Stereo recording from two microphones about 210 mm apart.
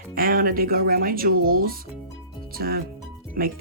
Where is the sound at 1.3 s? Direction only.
90° right.